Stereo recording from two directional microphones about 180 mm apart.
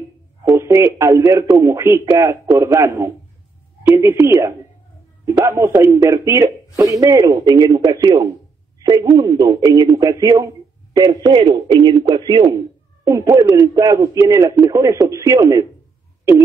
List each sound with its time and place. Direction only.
0.5 s speech: 15° right (ahead or behind)